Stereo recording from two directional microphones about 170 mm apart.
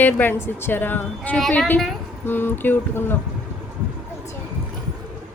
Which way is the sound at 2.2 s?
10° left (ahead or behind).